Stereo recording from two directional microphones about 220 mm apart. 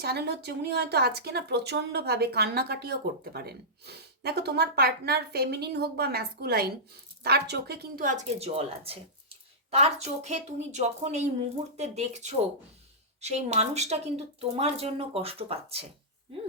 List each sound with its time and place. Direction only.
0.0 s a woman's voice: 50° right (ahead or behind); by 15.9 s 25° right (ahead or behind)